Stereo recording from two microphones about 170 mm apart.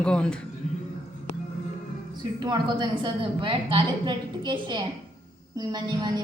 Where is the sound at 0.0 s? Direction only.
5° left (ahead or behind).